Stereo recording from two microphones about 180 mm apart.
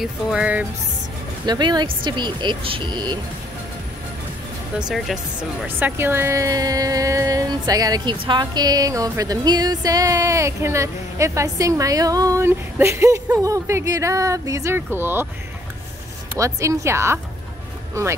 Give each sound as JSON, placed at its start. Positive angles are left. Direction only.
{"t": 0.0, "sound": "speech", "side_deg": -5}
{"t": 1.4, "sound": "speech", "side_deg": -25}
{"t": 4.7, "sound": "speech", "side_deg": 0}
{"t": 16.3, "sound": "speech", "side_deg": -15}